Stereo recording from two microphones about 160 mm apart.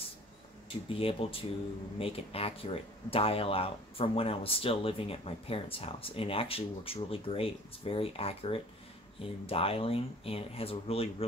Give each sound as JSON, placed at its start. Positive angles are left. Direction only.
{"t": 0.8, "sound": "speech", "side_deg": 35}